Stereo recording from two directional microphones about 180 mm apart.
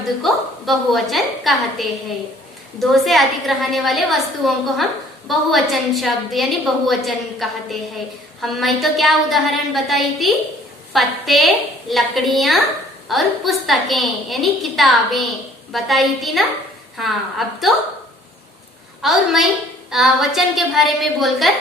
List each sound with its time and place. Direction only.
0.2 s a woman's voice: centre (ahead or behind)
19.0 s a woman's voice: centre (ahead or behind)